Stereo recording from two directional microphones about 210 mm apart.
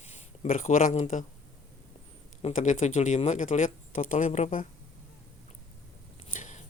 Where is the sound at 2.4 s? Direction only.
35° left (ahead or behind).